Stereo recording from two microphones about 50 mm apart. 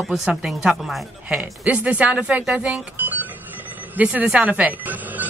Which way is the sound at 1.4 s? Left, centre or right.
Right.